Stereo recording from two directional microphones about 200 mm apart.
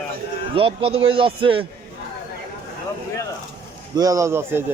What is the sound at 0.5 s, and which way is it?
A man's voice, 30° right (ahead or behind).